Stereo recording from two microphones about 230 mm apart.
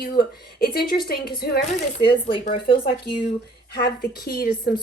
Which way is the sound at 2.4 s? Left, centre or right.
Left.